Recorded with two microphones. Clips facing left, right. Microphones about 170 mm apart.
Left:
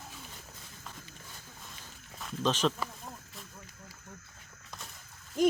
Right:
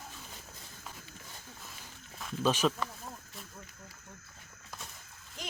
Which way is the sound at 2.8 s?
Centre (ahead or behind).